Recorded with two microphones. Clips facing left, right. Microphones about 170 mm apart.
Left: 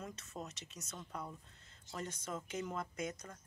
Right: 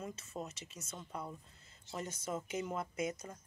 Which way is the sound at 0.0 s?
Centre (ahead or behind).